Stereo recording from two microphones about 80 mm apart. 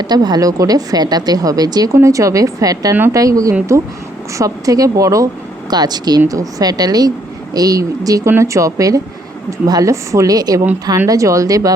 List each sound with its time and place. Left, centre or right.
0.0 s speech: right
2.0 s a woman's voice: right
5.7 s a woman's voice: right